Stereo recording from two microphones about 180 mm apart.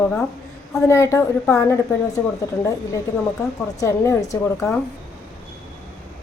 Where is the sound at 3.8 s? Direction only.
15° left (ahead or behind).